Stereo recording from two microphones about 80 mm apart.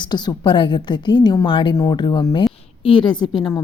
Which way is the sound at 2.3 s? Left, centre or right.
Left.